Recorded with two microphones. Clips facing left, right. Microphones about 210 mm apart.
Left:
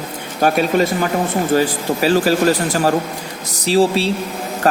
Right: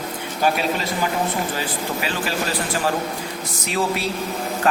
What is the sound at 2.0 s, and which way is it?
Speech, 40° left (ahead or behind).